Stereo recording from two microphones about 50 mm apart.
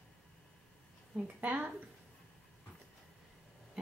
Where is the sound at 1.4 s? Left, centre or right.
Right.